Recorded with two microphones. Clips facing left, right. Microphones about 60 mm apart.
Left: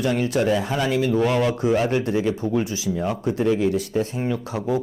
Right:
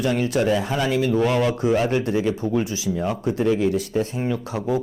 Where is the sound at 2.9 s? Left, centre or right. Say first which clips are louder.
Even; centre.